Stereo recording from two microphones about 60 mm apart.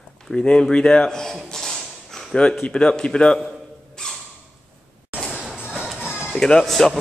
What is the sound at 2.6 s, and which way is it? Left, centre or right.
Speech, centre.